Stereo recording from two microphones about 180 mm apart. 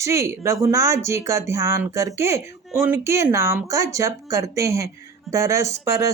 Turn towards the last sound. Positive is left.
turn(degrees=-15)  # may be behind; listen again after turning